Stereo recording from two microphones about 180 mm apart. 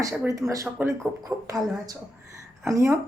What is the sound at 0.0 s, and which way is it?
Speech, 15° right (ahead or behind).